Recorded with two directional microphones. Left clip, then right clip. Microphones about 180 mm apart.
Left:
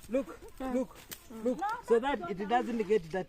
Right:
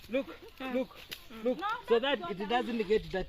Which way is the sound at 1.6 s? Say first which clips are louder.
Left 1 dB; 80° left.